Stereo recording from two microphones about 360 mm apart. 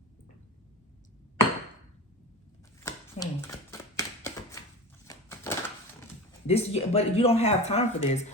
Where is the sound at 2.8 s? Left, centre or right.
Centre.